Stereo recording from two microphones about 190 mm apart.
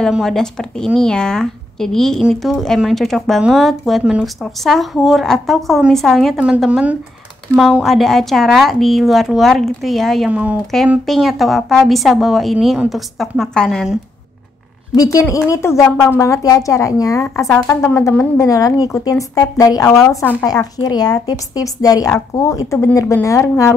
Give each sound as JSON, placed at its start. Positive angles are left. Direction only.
{"t": 0.0, "sound": "speech", "side_deg": 0}
{"t": 15.0, "sound": "a woman's voice", "side_deg": 15}